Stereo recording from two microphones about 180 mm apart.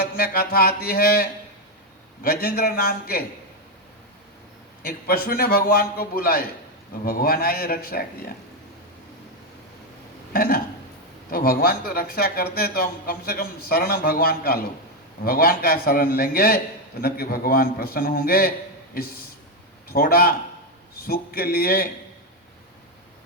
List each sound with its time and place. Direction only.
0.0 s a man's voice: 55° left (ahead or behind)
4.8 s a man's voice: 55° left (ahead or behind)
10.3 s a man's voice: 55° left (ahead or behind)
19.9 s a man's voice: 55° left (ahead or behind)